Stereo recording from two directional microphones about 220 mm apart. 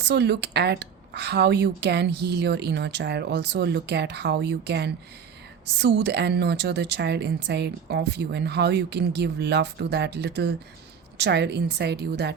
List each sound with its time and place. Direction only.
0.0 s a woman's voice: 50° right (ahead or behind)